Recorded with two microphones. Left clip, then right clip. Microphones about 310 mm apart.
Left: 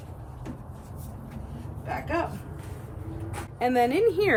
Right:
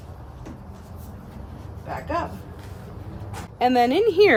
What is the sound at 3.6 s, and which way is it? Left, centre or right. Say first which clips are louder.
Speech: right 4 dB; right.